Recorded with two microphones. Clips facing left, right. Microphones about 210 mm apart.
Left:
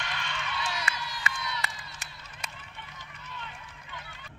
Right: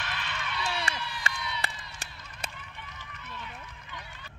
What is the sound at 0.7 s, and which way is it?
Run, 30° right (ahead or behind).